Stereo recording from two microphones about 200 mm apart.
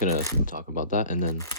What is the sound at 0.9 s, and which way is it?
Speech, 40° left (ahead or behind).